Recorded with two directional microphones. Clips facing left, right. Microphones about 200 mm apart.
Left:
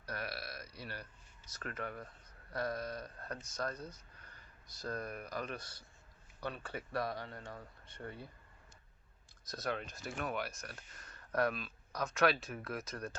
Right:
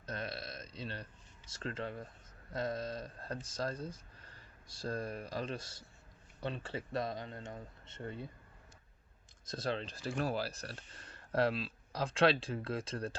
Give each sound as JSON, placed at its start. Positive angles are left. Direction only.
{"t": 0.0, "sound": "burping", "side_deg": -25}
{"t": 1.5, "sound": "speech", "side_deg": -25}
{"t": 9.5, "sound": "speech", "side_deg": -25}